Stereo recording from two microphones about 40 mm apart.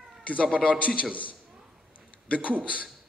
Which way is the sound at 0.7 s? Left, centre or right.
Left.